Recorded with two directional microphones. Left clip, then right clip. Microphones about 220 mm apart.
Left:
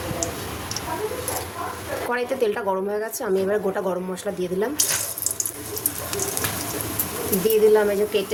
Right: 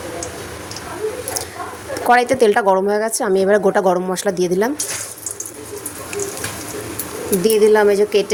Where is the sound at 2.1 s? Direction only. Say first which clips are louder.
Right 11 dB; 40° right (ahead or behind).